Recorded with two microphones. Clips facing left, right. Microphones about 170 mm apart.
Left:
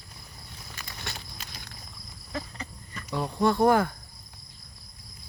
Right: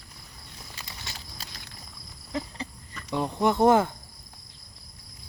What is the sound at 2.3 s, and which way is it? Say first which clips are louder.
Cricket: right 3 dB; 25° right (ahead or behind).